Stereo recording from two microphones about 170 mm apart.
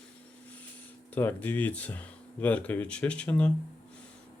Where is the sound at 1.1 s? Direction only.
10° left (ahead or behind).